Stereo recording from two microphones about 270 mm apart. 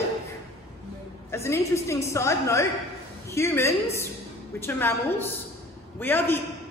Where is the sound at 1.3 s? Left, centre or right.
Centre.